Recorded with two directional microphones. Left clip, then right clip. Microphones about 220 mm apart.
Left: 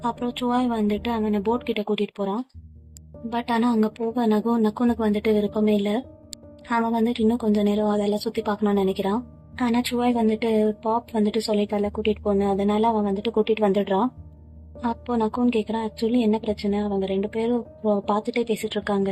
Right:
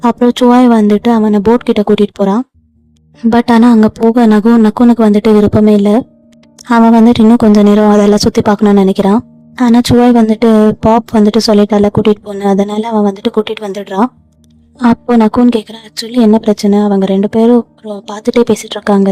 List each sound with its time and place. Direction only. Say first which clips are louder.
0.0 s a woman's voice: right 17 dB; 55° right (ahead or behind)
7.0 s a woman's voice: right 15 dB; 55° right (ahead or behind)